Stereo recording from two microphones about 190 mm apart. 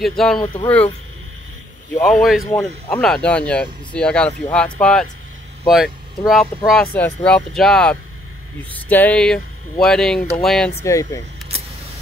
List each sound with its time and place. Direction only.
0.0 s speech: centre (ahead or behind)
2.0 s speech: centre (ahead or behind)
10.8 s speech: 15° left (ahead or behind)